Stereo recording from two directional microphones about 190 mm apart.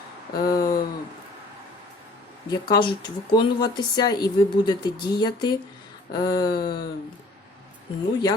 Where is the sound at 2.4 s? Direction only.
20° left (ahead or behind).